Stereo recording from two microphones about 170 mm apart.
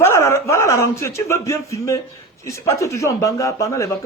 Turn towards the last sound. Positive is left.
turn(degrees=20)  # may be behind; listen again after turning